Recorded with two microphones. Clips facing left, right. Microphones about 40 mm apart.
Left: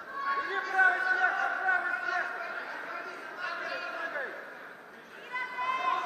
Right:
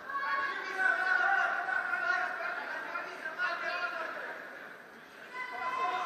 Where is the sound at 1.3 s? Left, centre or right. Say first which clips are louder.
Right 1 dB; centre.